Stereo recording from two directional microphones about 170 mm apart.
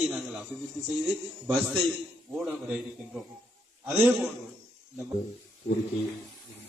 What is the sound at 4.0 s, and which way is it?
Speech, 5° right (ahead or behind).